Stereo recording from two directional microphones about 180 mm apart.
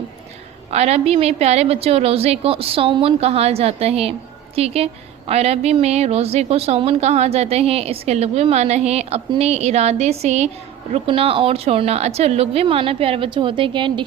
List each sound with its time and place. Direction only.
0.7 s a woman's voice: 35° right (ahead or behind)